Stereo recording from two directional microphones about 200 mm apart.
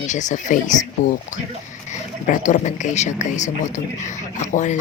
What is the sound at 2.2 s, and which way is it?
Speech, 40° left (ahead or behind).